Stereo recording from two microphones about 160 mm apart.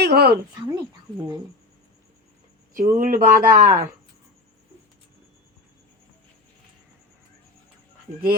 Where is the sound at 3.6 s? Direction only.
50° right (ahead or behind).